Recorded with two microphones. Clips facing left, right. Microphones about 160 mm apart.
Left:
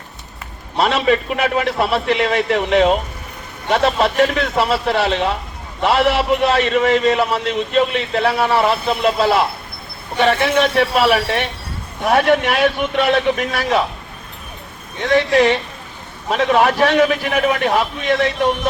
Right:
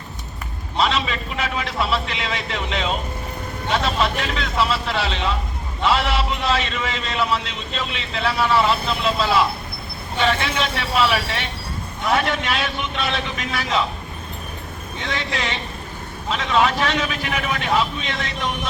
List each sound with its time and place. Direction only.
0.8 s a man's voice: 60° left (ahead or behind)
15.1 s a man's voice: 55° left (ahead or behind)